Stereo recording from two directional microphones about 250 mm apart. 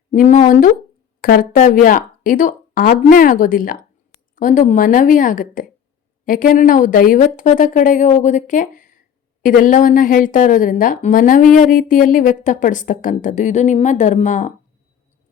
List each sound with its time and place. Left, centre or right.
0.1 s a woman's voice: left